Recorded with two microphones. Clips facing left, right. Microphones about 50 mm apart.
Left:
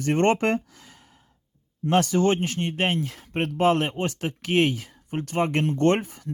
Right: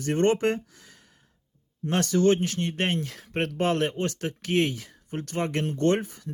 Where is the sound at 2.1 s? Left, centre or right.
Left.